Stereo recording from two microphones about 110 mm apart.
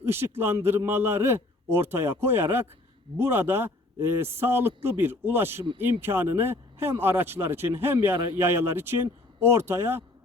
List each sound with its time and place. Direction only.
0.0 s a man's voice: 20° right (ahead or behind)